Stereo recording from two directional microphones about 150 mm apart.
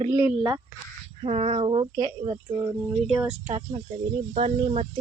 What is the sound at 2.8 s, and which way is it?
Speech, 10° right (ahead or behind).